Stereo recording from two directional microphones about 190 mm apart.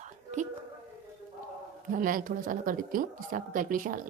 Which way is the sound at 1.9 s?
45° right (ahead or behind).